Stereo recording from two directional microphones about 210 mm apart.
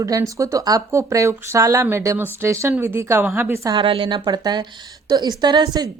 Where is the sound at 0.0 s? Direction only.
15° right (ahead or behind).